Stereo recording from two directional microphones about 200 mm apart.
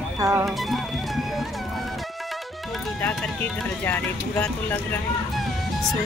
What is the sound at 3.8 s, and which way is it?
Speech, 10° left (ahead or behind).